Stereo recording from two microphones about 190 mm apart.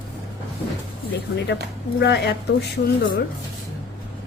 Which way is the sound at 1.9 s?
60° left (ahead or behind).